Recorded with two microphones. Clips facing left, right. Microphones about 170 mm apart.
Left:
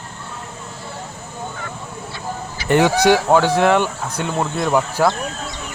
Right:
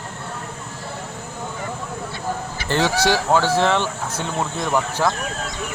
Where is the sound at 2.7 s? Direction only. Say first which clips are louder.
Left 5 dB; 15° left (ahead or behind).